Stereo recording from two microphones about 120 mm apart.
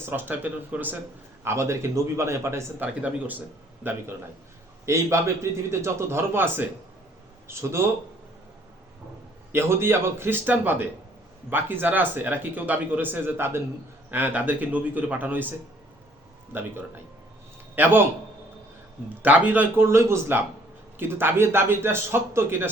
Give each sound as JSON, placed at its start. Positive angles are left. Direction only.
{"t": 0.0, "sound": "a man's voice", "side_deg": -15}
{"t": 1.5, "sound": "speech", "side_deg": -25}
{"t": 4.9, "sound": "speech", "side_deg": -25}
{"t": 9.5, "sound": "a man's voice", "side_deg": -20}
{"t": 19.2, "sound": "speech", "side_deg": -15}